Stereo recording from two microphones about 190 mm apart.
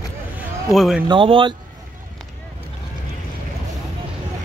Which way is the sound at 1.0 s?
25° right (ahead or behind).